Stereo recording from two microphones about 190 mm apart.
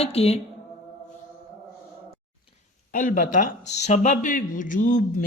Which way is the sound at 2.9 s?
45° left (ahead or behind).